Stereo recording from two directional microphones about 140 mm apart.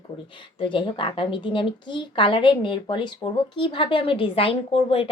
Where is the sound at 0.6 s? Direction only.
35° left (ahead or behind).